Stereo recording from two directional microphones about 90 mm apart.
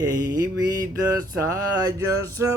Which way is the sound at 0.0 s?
45° right (ahead or behind).